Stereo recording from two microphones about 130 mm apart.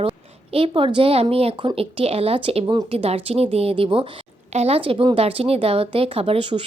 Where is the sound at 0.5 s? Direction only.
45° right (ahead or behind).